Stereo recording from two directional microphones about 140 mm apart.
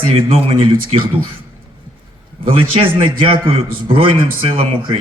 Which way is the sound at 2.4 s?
40° right (ahead or behind).